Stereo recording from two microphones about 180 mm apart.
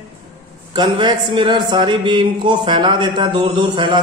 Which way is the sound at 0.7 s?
25° right (ahead or behind).